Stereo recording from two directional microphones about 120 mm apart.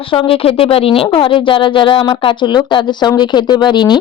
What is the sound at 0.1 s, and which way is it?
Speech, 50° left (ahead or behind).